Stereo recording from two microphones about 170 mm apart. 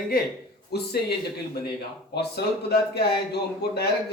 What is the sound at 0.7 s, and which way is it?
Speech, 70° left (ahead or behind).